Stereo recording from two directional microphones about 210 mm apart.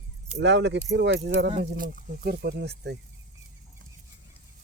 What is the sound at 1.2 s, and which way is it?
Speech, 55° right (ahead or behind).